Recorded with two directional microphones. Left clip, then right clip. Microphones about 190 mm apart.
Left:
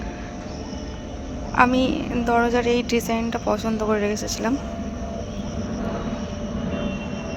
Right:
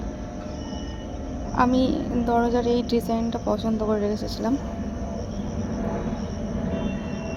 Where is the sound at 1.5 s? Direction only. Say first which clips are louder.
Left 4 dB; 10° right (ahead or behind).